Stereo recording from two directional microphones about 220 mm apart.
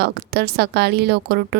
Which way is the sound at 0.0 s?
45° right (ahead or behind).